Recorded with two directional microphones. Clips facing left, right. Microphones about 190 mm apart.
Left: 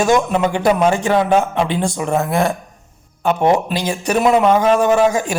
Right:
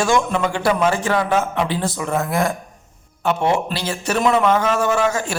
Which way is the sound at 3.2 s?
15° left (ahead or behind).